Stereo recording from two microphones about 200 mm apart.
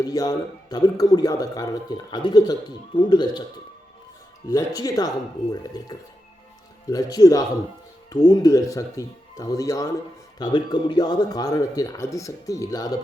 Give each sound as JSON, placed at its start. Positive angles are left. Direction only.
{"t": 0.0, "sound": "a man's voice", "side_deg": 20}
{"t": 4.4, "sound": "a man's voice", "side_deg": 20}